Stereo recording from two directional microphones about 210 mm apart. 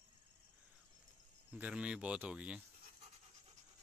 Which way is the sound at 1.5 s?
5° right (ahead or behind).